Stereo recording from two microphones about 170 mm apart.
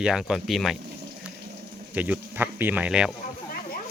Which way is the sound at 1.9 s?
10° right (ahead or behind).